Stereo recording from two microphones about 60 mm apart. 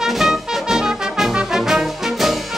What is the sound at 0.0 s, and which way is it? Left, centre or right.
Music, centre.